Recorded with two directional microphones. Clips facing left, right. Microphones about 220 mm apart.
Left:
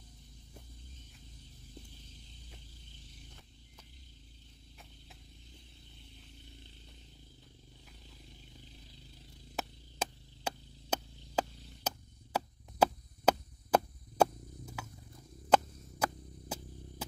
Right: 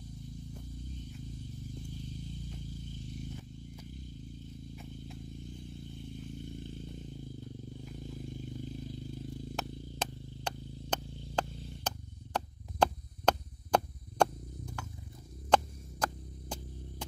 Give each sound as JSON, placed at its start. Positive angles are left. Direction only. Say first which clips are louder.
{"t": 6.1, "sound": "chainsaw", "louder": "right 15 dB", "side_deg": -50}
{"t": 7.9, "sound": "vehicle", "louder": "right 16 dB", "side_deg": -50}
{"t": 9.6, "sound": "a sound", "louder": "left 3 dB", "side_deg": 5}
{"t": 15.5, "sound": "hum", "louder": "even", "side_deg": 5}